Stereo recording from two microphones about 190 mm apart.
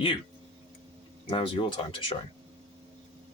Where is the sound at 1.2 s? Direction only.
25° left (ahead or behind).